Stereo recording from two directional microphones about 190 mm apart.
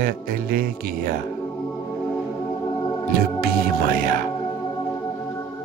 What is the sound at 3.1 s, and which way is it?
Speech, 55° right (ahead or behind).